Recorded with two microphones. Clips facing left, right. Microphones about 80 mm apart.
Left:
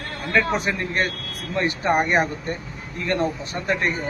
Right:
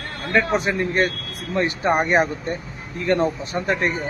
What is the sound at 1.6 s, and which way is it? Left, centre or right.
Speech, centre.